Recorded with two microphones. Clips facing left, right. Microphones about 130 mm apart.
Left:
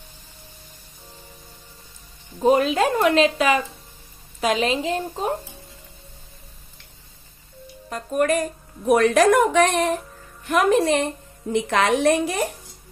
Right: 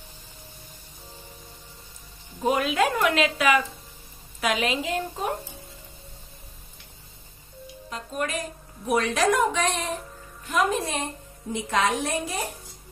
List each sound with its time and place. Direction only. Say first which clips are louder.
2.4 s speech: left 5 dB; 35° left (ahead or behind)
7.9 s a woman's voice: left 9 dB; 50° left (ahead or behind); by 12.4 s 70° left (ahead or behind)